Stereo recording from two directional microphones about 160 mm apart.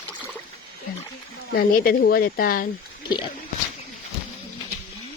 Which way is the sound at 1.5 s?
70° left (ahead or behind).